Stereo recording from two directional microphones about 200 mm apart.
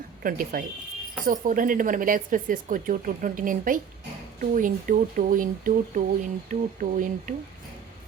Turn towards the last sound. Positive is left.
turn(degrees=-40)  # may be behind; listen again after turning